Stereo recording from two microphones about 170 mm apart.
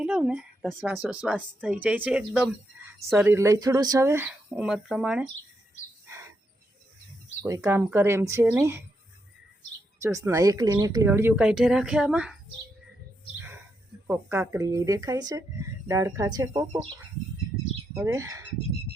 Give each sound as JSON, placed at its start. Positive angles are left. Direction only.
{"t": 0.0, "sound": "speech", "side_deg": -5}
{"t": 3.3, "sound": "speech", "side_deg": -20}
{"t": 7.4, "sound": "speech", "side_deg": -20}
{"t": 10.0, "sound": "speech", "side_deg": -20}
{"t": 14.1, "sound": "speech", "side_deg": -15}
{"t": 17.9, "sound": "speech", "side_deg": -15}